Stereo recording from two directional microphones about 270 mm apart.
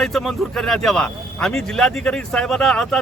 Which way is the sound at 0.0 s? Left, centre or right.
Centre.